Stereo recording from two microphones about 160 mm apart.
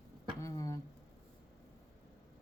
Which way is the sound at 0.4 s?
20° left (ahead or behind).